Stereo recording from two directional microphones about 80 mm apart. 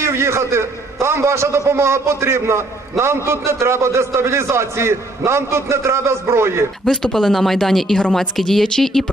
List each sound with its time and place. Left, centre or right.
0.0 s a man's voice: right
6.9 s speech: centre